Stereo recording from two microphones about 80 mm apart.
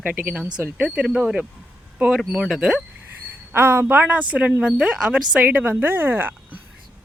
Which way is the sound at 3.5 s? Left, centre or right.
Right.